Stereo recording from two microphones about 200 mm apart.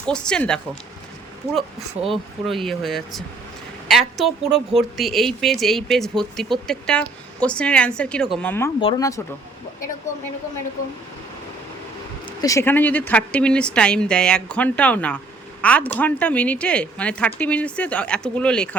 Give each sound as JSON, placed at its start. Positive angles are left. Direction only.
{"t": 0.0, "sound": "speech", "side_deg": 5}
{"t": 2.0, "sound": "speech", "side_deg": 0}
{"t": 8.8, "sound": "speech", "side_deg": 25}
{"t": 12.4, "sound": "speech", "side_deg": 15}